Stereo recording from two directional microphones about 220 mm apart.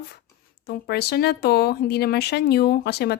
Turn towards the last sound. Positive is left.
turn(degrees=50)  # may be behind; listen again after turning